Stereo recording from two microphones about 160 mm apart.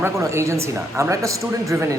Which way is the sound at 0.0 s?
15° right (ahead or behind).